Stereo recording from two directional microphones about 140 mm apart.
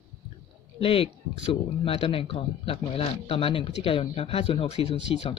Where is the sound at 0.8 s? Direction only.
45° left (ahead or behind).